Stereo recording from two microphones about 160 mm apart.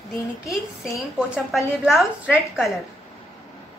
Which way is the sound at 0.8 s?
Centre (ahead or behind).